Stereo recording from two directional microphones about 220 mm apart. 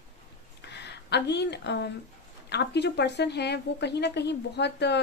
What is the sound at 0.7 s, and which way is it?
A woman's voice, 50° left (ahead or behind).